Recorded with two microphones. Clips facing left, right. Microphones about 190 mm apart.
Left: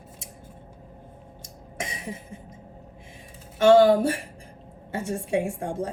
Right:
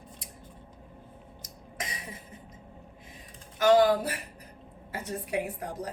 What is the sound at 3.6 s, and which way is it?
Speech, 30° left (ahead or behind).